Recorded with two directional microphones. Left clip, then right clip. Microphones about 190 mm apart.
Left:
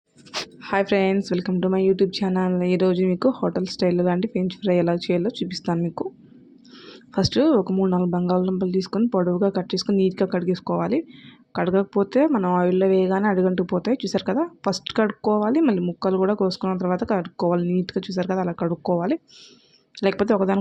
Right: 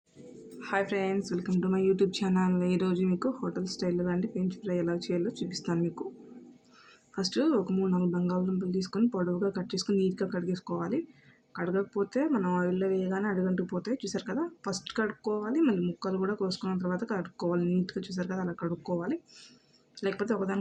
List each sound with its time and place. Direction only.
0.6 s speech: 30° left (ahead or behind)
7.2 s speech: 40° left (ahead or behind)